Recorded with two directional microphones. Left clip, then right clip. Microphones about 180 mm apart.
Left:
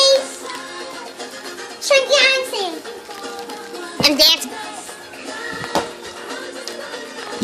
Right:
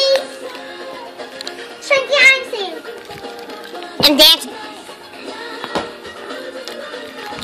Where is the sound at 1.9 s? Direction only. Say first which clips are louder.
Right 2 dB; 20° left (ahead or behind).